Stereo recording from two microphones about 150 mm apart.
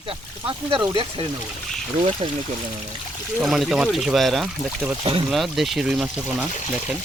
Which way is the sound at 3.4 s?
5° right (ahead or behind).